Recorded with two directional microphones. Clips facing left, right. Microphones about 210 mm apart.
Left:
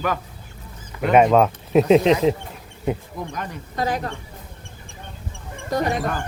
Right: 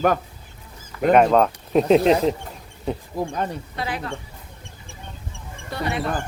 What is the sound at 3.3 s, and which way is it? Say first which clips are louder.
Speech: right 5 dB; 30° right (ahead or behind).